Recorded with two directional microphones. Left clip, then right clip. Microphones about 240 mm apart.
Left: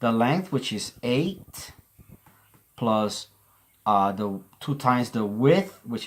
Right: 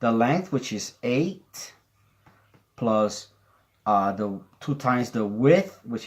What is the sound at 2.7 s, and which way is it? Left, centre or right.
Speech, left.